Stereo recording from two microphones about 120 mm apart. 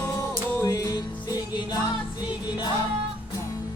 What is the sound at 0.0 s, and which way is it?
Music, 20° left (ahead or behind).